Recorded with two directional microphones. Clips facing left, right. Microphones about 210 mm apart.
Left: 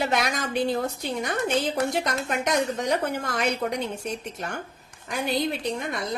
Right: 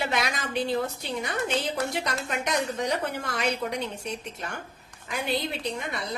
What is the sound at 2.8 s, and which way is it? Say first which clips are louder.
Speech: left 3 dB; 45° left (ahead or behind).